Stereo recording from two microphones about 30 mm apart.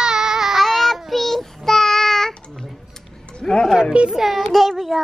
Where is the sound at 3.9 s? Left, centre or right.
Right.